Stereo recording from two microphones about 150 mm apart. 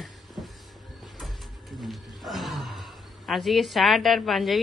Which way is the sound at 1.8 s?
Centre (ahead or behind).